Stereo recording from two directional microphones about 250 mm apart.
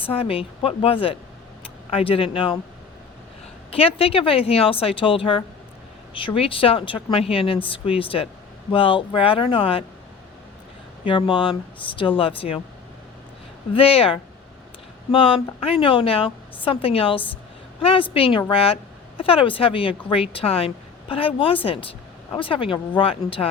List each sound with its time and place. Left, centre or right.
0.0 s a woman's voice: left
3.7 s a woman's voice: left
11.0 s a woman's voice: centre
13.7 s a woman's voice: left